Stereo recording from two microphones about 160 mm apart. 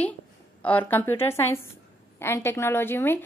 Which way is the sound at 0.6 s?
10° left (ahead or behind).